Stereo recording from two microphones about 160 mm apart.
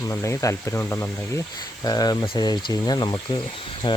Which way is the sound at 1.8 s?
25° left (ahead or behind).